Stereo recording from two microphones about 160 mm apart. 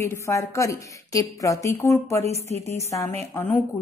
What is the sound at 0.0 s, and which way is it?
A woman's voice, 20° left (ahead or behind).